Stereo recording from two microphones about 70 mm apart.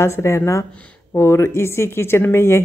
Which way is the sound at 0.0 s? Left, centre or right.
Left.